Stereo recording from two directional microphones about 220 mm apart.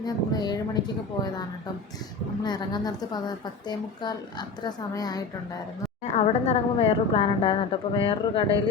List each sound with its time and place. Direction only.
0.0 s a woman's voice: 20° left (ahead or behind)
2.4 s a woman's voice: 20° left (ahead or behind)
6.1 s a woman's voice: 30° left (ahead or behind)